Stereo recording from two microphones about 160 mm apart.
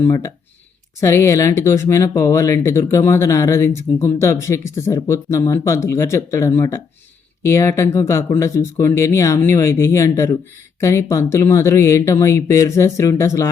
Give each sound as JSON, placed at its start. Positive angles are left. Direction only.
{"t": 0.0, "sound": "speech", "side_deg": 20}